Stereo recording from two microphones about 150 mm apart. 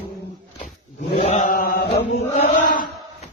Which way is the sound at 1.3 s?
60° left (ahead or behind).